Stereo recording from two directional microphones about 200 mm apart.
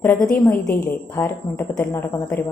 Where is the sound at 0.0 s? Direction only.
10° left (ahead or behind).